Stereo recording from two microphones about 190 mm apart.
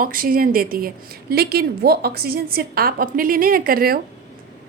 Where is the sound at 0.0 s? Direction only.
50° right (ahead or behind).